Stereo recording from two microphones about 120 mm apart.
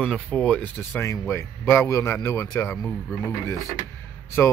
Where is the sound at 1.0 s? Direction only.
20° left (ahead or behind).